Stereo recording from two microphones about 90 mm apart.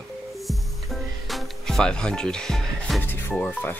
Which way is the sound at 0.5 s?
Centre (ahead or behind).